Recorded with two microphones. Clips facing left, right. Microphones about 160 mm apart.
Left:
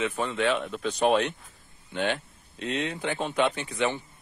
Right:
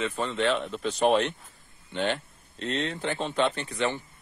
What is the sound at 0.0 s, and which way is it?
Speech, 5° left (ahead or behind).